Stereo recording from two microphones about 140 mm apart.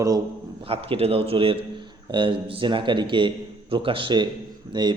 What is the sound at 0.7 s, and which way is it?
A man's voice, 45° right (ahead or behind).